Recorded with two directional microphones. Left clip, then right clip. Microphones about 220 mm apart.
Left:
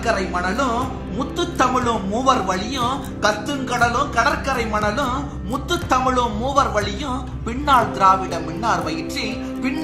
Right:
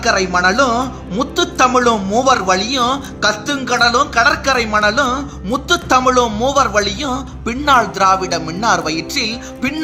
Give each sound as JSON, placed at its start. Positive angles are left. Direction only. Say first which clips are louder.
{"t": 0.0, "sound": "a man's voice", "louder": "right 8 dB", "side_deg": -50}